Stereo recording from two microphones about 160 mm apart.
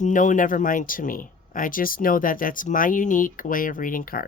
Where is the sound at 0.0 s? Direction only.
50° left (ahead or behind).